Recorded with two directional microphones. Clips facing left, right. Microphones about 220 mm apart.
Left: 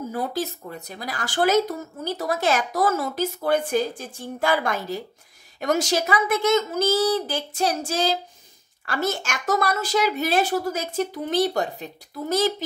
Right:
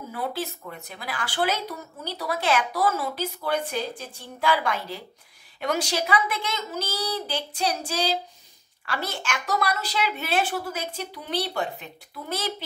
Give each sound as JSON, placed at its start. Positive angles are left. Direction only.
{"t": 0.1, "sound": "speech", "side_deg": 40}